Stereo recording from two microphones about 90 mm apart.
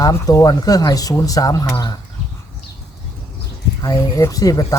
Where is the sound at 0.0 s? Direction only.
40° left (ahead or behind).